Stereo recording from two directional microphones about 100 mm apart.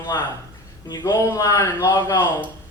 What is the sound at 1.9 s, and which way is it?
Speech, 45° left (ahead or behind).